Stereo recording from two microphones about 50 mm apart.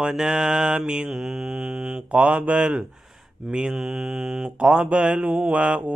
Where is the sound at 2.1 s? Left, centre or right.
Right.